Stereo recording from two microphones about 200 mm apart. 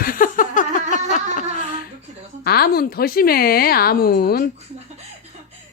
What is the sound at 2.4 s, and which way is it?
A woman's voice, 50° left (ahead or behind).